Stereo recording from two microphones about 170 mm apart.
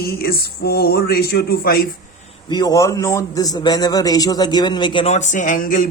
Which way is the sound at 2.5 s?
20° left (ahead or behind).